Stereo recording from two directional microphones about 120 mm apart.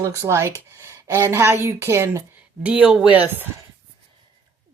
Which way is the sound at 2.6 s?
10° right (ahead or behind).